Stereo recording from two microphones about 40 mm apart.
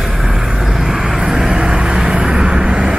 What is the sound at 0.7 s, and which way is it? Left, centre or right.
Vehicle, centre.